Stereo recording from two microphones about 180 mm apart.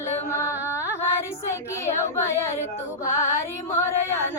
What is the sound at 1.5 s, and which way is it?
Child singing, 15° left (ahead or behind).